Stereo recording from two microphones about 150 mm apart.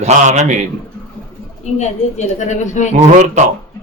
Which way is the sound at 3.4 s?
50° right (ahead or behind).